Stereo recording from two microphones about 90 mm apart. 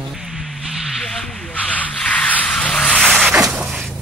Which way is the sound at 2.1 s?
15° left (ahead or behind).